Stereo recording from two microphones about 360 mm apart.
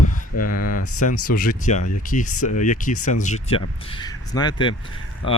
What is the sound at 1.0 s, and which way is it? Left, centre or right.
Speech, left.